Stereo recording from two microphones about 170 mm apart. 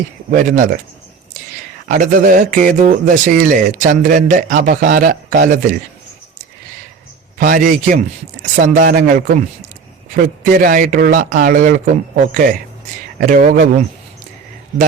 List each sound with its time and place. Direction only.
0.3 s speech: 50° right (ahead or behind)
1.9 s speech: 50° right (ahead or behind)
7.3 s speech: 55° right (ahead or behind)